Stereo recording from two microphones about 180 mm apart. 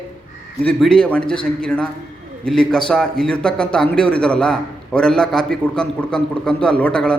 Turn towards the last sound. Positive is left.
turn(degrees=5)  # may be behind; listen again after turning